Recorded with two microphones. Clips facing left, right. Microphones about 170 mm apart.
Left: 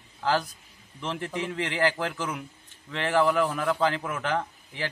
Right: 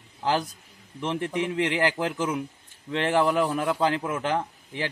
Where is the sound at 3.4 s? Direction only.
35° right (ahead or behind).